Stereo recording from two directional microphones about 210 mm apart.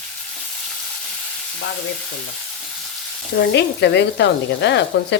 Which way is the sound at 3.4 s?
55° left (ahead or behind).